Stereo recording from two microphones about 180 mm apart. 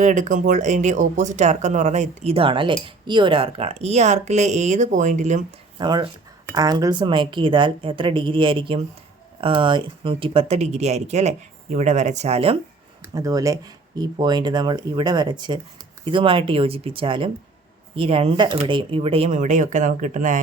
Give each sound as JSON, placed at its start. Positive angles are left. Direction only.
{"t": 0.0, "sound": "speech", "side_deg": -45}
{"t": 5.8, "sound": "speech", "side_deg": -25}
{"t": 13.0, "sound": "speech", "side_deg": -20}